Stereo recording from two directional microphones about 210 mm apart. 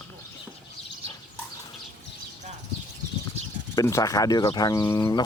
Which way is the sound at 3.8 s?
15° left (ahead or behind).